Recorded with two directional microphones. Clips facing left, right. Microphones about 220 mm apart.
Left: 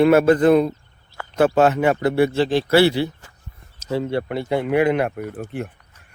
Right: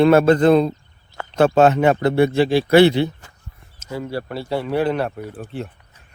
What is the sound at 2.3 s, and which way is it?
Speech, 10° right (ahead or behind).